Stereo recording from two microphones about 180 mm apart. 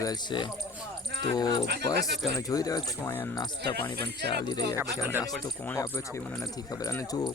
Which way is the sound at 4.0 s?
65° right (ahead or behind).